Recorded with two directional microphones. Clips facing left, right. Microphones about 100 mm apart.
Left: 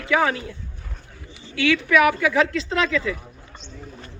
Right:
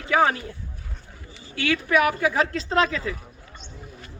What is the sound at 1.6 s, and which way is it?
A man's voice, 40° right (ahead or behind).